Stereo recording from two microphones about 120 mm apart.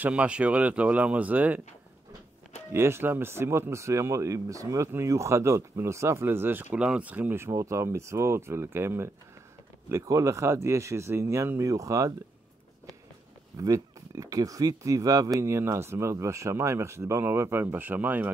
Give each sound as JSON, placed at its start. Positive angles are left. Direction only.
{"t": 0.0, "sound": "speech", "side_deg": -10}
{"t": 2.7, "sound": "speech", "side_deg": -20}
{"t": 13.6, "sound": "speech", "side_deg": -30}